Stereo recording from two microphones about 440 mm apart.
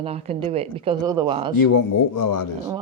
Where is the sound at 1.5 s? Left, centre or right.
Left.